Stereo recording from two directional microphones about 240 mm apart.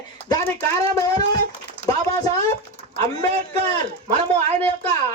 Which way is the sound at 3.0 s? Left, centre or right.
Right.